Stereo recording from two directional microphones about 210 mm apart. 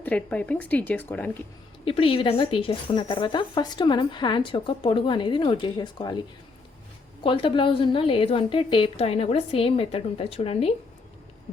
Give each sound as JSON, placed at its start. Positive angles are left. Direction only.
{"t": 0.0, "sound": "speech", "side_deg": 5}
{"t": 1.8, "sound": "speech", "side_deg": 25}
{"t": 7.2, "sound": "speech", "side_deg": 25}